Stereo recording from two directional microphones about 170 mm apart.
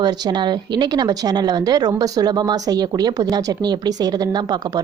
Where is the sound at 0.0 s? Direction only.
25° right (ahead or behind).